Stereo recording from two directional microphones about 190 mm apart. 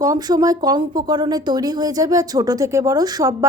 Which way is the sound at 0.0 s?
20° right (ahead or behind).